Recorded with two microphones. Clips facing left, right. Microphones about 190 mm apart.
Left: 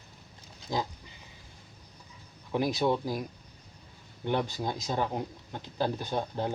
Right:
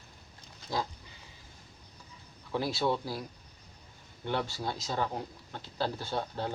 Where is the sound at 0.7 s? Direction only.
15° left (ahead or behind).